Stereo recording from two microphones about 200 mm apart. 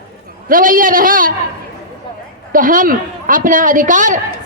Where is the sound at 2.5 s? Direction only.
45° right (ahead or behind).